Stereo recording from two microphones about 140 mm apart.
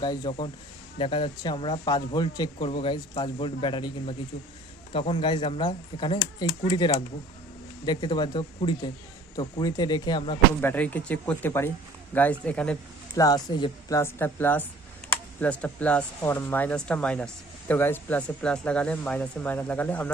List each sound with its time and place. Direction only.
0.0 s speech: 30° left (ahead or behind)
10.6 s speech: 15° left (ahead or behind)
13.1 s speech: 25° left (ahead or behind); by 20.1 s 10° left (ahead or behind)